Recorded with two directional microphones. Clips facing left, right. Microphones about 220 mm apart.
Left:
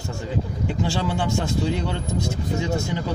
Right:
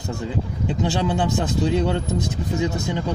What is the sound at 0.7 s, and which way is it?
A man's voice, 20° right (ahead or behind).